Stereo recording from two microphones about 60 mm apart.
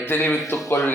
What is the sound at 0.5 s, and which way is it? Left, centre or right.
Speech, left.